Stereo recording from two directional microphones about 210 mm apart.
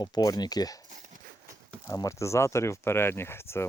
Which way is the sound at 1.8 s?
15° left (ahead or behind).